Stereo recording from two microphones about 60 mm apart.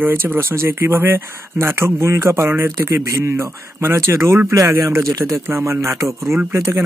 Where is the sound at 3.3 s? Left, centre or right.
Right.